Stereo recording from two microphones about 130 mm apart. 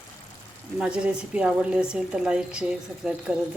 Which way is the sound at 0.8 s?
5° right (ahead or behind).